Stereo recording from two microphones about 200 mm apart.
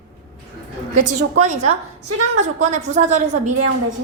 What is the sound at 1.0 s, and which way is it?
A woman's voice, 40° right (ahead or behind).